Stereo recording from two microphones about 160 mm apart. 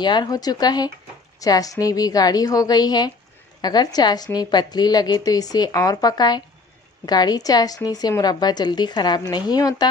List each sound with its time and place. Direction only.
0.0 s a woman's voice: 25° left (ahead or behind)